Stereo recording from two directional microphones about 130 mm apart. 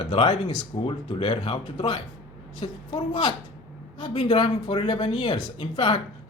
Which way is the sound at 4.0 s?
40° left (ahead or behind).